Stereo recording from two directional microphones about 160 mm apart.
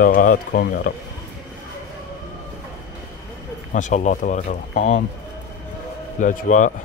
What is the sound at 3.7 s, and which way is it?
Speech, 50° left (ahead or behind).